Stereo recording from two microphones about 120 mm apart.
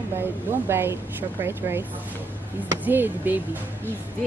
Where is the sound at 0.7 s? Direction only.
20° right (ahead or behind).